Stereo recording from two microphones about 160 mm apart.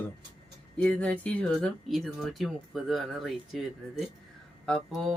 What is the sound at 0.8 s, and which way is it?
Speech, 10° left (ahead or behind).